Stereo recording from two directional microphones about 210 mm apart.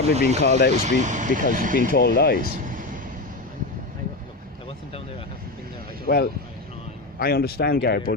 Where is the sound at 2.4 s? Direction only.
40° right (ahead or behind).